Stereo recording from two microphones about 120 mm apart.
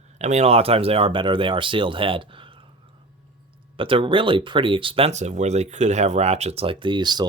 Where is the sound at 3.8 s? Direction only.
45° right (ahead or behind).